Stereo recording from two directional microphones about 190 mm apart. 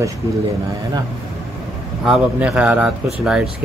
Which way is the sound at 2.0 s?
Centre (ahead or behind).